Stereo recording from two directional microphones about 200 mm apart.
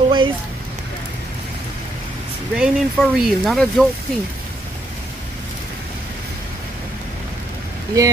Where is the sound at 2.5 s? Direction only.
Centre (ahead or behind).